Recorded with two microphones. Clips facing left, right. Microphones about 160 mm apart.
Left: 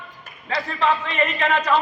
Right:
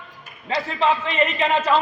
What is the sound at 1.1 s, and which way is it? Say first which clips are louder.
Speech: right 1 dB; 20° right (ahead or behind).